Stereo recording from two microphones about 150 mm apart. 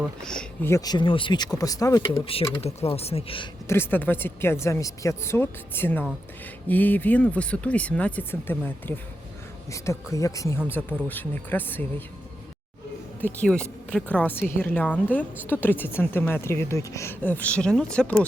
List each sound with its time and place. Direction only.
0.2 s speech: 5° left (ahead or behind)
0.7 s speech: 25° left (ahead or behind)
2.6 s speech: 45° left (ahead or behind)
3.7 s a woman's voice: 15° left (ahead or behind)
13.2 s a woman's voice: 5° left (ahead or behind)